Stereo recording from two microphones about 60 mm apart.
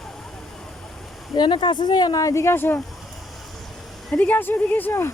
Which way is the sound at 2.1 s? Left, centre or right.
Left.